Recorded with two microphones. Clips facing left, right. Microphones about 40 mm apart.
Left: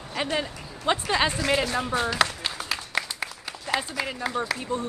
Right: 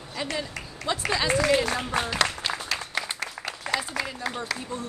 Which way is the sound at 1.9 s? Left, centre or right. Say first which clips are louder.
Left 2 dB; right.